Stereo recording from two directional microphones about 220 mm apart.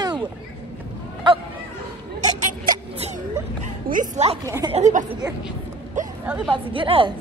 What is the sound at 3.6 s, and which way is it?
Bow-wow, 35° right (ahead or behind).